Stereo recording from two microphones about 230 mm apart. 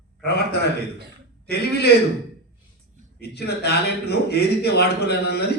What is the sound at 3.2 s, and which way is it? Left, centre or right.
A man's voice, left.